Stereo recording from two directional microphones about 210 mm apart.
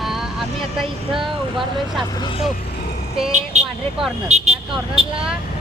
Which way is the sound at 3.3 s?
35° right (ahead or behind).